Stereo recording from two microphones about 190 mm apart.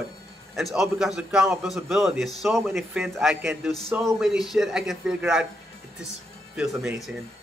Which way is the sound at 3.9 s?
15° right (ahead or behind).